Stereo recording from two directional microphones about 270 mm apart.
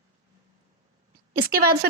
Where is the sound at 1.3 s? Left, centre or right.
Right.